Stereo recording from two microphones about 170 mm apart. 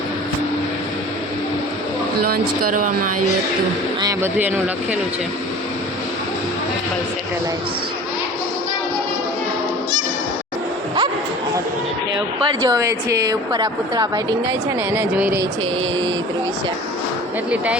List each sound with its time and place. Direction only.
2.2 s speech: 55° right (ahead or behind)
4.0 s speech: 10° right (ahead or behind)
12.5 s a woman's voice: 20° right (ahead or behind)
14.8 s speech: 10° right (ahead or behind)